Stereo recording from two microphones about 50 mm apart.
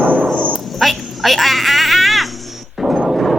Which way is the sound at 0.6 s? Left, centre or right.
Centre.